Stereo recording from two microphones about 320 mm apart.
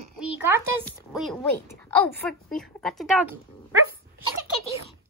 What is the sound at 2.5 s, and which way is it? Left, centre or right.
Speech, centre.